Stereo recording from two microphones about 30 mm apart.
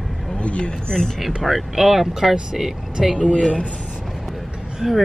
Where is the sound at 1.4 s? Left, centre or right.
Centre.